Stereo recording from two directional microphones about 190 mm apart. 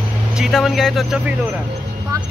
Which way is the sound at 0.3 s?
Centre (ahead or behind).